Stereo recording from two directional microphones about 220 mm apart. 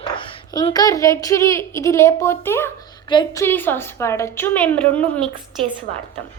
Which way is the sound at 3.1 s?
20° left (ahead or behind).